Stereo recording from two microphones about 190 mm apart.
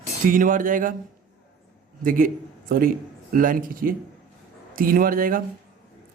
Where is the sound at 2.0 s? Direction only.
45° right (ahead or behind).